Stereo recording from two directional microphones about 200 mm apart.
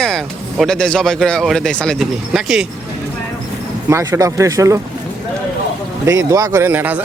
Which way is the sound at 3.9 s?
15° right (ahead or behind).